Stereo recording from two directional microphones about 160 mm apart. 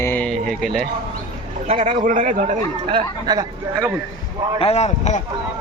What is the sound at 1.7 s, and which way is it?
Speech, 55° right (ahead or behind).